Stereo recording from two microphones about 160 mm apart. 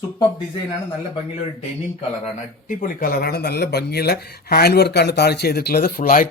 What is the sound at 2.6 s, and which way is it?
Speech, 55° left (ahead or behind).